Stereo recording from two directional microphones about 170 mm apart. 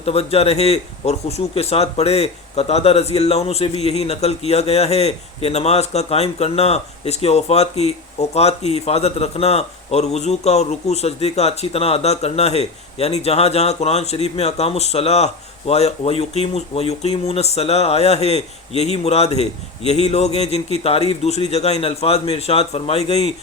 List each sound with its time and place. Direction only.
0.0 s a man's voice: 35° left (ahead or behind)